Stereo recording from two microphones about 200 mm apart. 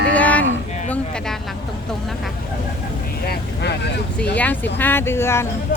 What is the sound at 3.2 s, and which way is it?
Speech, 55° left (ahead or behind).